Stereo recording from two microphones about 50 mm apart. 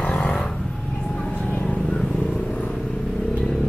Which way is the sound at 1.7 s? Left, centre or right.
Centre.